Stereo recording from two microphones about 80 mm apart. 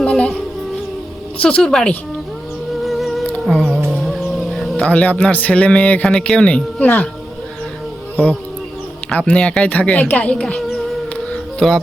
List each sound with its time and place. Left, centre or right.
0.0 s music: centre
1.4 s speech: centre
2.8 s music: centre
4.9 s speech: centre
9.1 s speech: centre
11.3 s music: centre